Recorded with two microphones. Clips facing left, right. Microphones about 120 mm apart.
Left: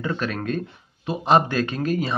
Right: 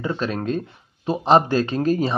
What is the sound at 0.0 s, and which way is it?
A man's voice, 25° right (ahead or behind).